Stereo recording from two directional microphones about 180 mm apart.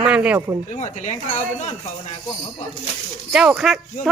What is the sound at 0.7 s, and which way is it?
Speech, 40° left (ahead or behind).